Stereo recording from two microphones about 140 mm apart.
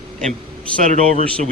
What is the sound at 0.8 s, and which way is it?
Speech, 60° right (ahead or behind).